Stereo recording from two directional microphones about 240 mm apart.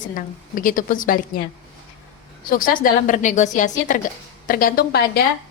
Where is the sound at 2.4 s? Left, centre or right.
Left.